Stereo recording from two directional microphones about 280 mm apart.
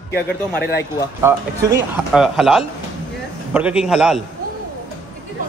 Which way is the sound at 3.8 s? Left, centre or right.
Centre.